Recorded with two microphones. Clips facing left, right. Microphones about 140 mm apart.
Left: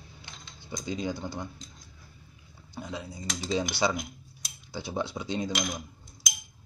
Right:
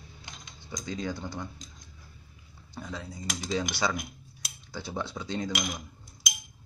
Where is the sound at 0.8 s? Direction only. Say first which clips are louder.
Left 2 dB; 20° left (ahead or behind).